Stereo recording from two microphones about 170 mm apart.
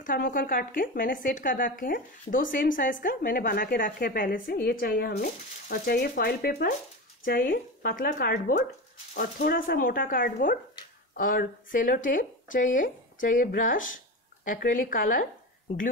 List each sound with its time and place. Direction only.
0.0 s speech: 55° left (ahead or behind)